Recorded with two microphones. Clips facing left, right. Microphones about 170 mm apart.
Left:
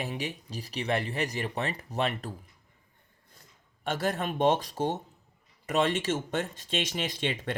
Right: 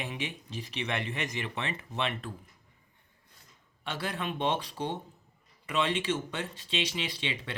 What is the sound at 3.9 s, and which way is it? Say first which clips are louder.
Speech: left 5 dB; 45° left (ahead or behind).